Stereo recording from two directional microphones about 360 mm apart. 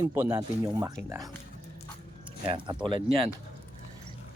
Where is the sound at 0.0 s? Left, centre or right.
Centre.